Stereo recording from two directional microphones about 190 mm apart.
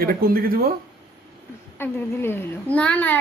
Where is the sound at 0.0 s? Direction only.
50° right (ahead or behind).